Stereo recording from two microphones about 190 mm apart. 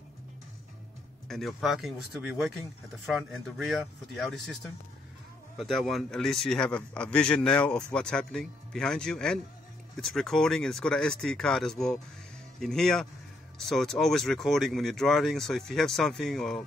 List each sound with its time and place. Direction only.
1.3 s speech: centre (ahead or behind)